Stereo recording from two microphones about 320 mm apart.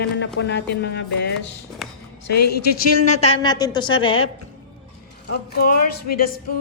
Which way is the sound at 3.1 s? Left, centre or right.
Centre.